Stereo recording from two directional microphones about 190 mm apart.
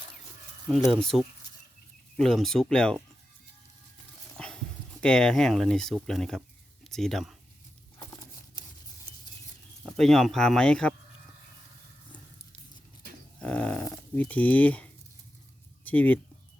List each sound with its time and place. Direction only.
0.7 s speech: centre (ahead or behind)
2.1 s speech: centre (ahead or behind)
4.4 s speech: 5° left (ahead or behind)
9.8 s speech: centre (ahead or behind)
13.4 s dog: 5° left (ahead or behind)
15.8 s speech: 10° left (ahead or behind)